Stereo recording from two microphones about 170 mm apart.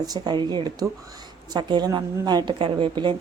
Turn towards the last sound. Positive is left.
turn(degrees=-25)  # may be behind; listen again after turning